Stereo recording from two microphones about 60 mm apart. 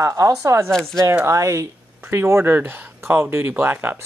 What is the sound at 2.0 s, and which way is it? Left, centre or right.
Speech, right.